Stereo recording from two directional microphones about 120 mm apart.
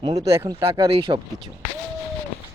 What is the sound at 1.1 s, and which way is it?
Speech, 35° right (ahead or behind).